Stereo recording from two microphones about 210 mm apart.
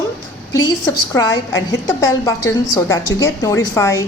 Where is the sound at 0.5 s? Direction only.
15° left (ahead or behind).